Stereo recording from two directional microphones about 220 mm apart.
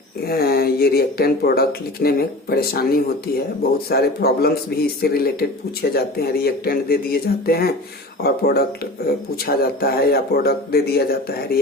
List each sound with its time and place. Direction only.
0.3 s speech: 45° left (ahead or behind)